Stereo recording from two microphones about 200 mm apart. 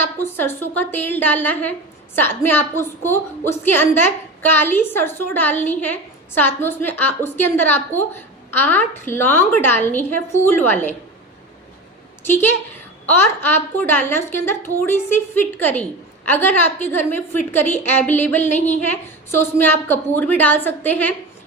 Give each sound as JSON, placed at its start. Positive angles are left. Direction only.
{"t": 0.2, "sound": "a woman's voice", "side_deg": 10}
{"t": 12.2, "sound": "a woman's voice", "side_deg": 10}
{"t": 18.5, "sound": "speech", "side_deg": 35}
{"t": 18.8, "sound": "a woman's voice", "side_deg": 10}